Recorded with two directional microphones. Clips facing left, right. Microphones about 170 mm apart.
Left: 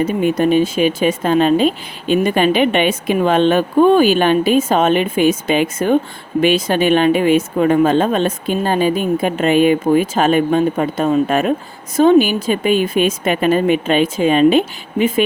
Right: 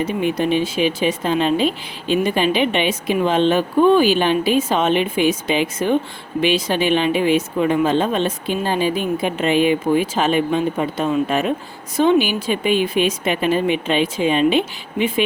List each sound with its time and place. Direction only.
0.0 s speech: 50° left (ahead or behind)